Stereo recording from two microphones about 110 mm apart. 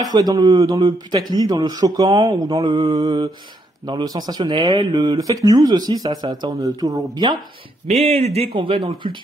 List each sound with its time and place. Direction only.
0.0 s speech: 35° right (ahead or behind)
2.5 s speech: 45° right (ahead or behind)
7.9 s speech: 75° right (ahead or behind)
8.5 s speech: 55° right (ahead or behind)